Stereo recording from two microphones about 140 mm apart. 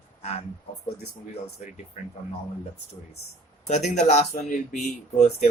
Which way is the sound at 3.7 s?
55° left (ahead or behind).